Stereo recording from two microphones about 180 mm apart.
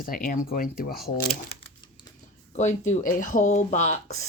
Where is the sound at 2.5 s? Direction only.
40° left (ahead or behind).